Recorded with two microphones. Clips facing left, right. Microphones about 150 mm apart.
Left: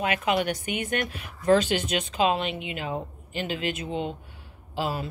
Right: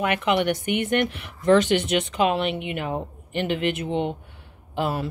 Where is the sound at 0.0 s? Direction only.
70° right (ahead or behind).